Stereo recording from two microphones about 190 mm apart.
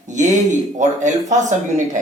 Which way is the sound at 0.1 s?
40° right (ahead or behind).